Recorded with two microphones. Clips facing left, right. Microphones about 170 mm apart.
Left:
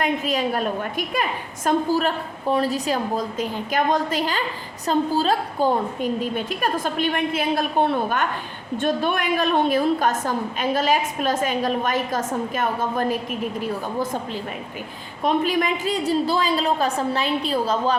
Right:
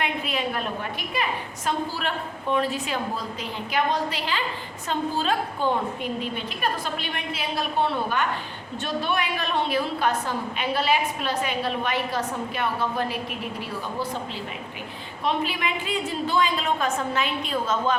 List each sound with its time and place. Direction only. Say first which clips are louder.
0.0 s a woman's voice: left 5 dB; 40° left (ahead or behind)
15.2 s a woman's voice: left 6 dB; 45° left (ahead or behind)